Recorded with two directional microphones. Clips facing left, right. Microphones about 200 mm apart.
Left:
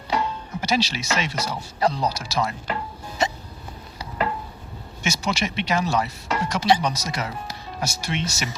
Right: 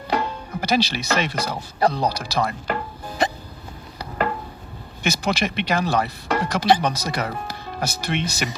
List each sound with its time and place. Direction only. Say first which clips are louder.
0.1 s speech: right 1 dB; 55° right (ahead or behind)
5.0 s speech: right 3 dB; 55° right (ahead or behind)